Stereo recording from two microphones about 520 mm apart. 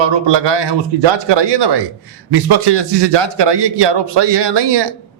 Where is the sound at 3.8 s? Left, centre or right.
Right.